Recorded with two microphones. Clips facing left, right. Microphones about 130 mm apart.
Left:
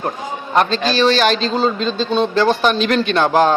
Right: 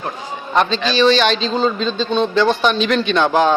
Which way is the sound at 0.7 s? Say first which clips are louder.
Right 1 dB; 45° left (ahead or behind).